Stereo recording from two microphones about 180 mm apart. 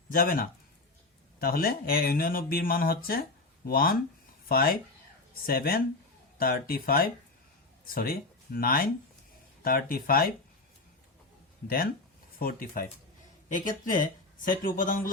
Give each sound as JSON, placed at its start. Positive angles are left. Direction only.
{"t": 0.1, "sound": "speech", "side_deg": 55}
{"t": 12.4, "sound": "speech", "side_deg": 55}